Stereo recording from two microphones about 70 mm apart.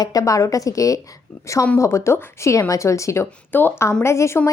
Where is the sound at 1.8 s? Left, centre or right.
Left.